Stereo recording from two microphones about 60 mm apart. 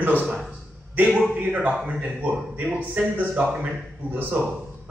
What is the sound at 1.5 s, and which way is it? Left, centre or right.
A man's voice, centre.